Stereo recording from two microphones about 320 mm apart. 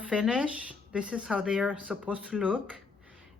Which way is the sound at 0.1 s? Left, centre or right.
Centre.